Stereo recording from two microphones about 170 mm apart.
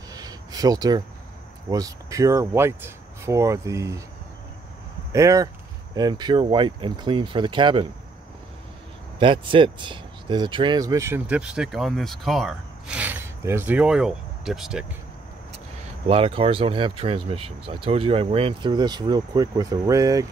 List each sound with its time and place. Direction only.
0.1 s a sound: 20° right (ahead or behind)
1.7 s speech: 20° right (ahead or behind)
5.1 s speech: 20° right (ahead or behind)
9.2 s speech: 30° right (ahead or behind); by 14.9 s 5° right (ahead or behind)
16.1 s speech: 35° right (ahead or behind)